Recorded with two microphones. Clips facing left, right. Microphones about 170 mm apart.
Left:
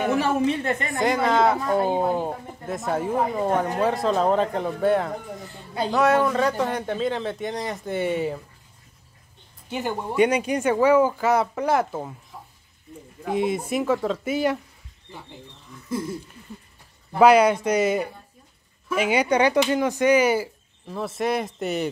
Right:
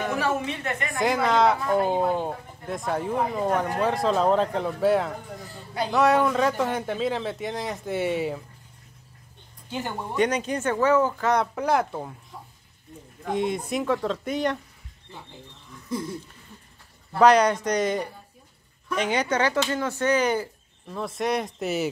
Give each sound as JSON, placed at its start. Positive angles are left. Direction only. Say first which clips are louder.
{"t": 0.2, "sound": "a woman's voice", "louder": "left 5 dB", "side_deg": 30}
{"t": 0.9, "sound": "speech", "louder": "left 1 dB", "side_deg": 0}
{"t": 9.7, "sound": "speech", "louder": "left 4 dB", "side_deg": 15}
{"t": 13.2, "sound": "speech", "louder": "left 2 dB", "side_deg": 5}
{"t": 17.1, "sound": "speech", "louder": "left 2 dB", "side_deg": 10}